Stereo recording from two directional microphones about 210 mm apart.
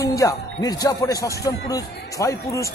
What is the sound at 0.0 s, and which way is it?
Speech, 15° left (ahead or behind).